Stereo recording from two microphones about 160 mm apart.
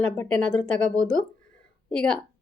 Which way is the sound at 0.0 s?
5° left (ahead or behind).